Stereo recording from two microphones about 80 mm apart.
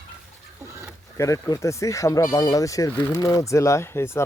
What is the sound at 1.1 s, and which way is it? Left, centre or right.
Speech, left.